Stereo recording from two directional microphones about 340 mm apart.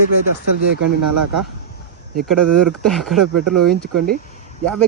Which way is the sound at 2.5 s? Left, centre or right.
Centre.